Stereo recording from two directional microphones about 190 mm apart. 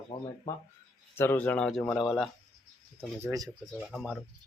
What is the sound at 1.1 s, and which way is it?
Speech, 10° left (ahead or behind).